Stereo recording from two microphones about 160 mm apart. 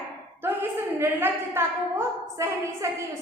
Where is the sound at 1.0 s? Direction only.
15° right (ahead or behind).